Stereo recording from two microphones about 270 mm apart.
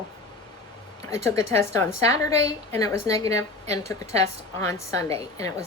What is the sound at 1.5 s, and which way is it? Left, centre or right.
A woman's voice, centre.